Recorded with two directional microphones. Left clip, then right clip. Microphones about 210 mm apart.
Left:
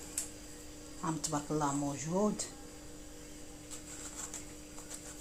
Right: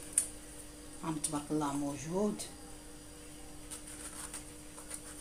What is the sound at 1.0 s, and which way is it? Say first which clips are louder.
Speech: left 2 dB; 20° left (ahead or behind).